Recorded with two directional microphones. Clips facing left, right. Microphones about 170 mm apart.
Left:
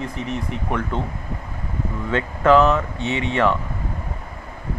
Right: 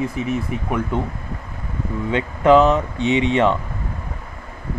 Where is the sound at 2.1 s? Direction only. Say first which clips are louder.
Right 2 dB; 15° right (ahead or behind).